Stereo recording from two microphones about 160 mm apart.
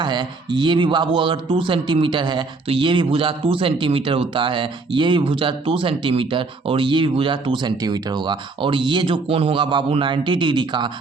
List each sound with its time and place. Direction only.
0.0 s speech: 30° right (ahead or behind)